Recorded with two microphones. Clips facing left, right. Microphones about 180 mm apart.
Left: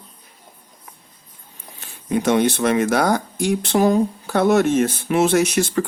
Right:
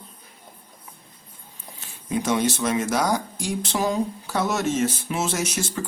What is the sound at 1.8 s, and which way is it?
Speech, 60° left (ahead or behind).